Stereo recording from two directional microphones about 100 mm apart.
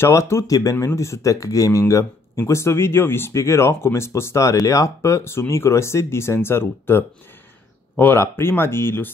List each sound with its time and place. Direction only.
0.0 s speech: 30° left (ahead or behind)